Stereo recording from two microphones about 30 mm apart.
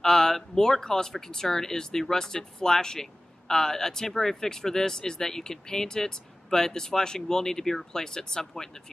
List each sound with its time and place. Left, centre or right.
0.0 s speech: centre